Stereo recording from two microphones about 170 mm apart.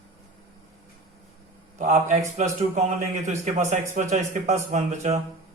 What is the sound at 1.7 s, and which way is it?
A man's voice, 45° right (ahead or behind).